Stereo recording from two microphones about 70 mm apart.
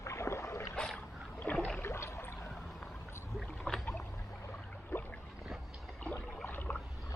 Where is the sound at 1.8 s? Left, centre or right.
Left.